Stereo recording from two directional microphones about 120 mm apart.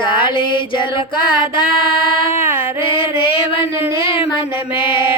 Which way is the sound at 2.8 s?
50° left (ahead or behind).